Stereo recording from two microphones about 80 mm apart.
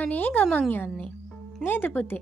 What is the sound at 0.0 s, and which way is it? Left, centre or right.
Speech, left.